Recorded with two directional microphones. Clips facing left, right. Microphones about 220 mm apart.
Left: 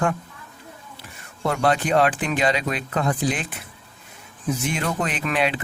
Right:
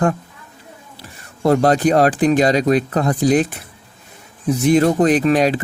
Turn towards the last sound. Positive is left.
turn(degrees=-40)  # may be behind; listen again after turning